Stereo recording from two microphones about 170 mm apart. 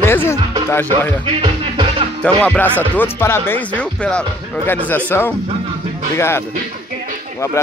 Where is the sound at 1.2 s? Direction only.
30° right (ahead or behind).